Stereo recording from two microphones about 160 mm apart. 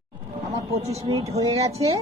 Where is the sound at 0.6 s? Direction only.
40° right (ahead or behind).